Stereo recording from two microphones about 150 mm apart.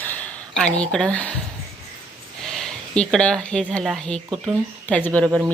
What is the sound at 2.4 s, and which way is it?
Speech, 5° left (ahead or behind).